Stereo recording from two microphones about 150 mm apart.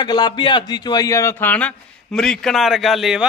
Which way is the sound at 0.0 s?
30° left (ahead or behind).